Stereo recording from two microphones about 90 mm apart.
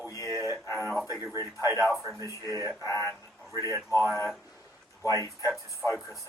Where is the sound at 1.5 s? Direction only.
35° left (ahead or behind).